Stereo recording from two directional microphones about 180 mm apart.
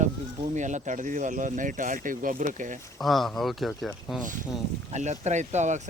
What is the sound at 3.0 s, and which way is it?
Speech, centre (ahead or behind).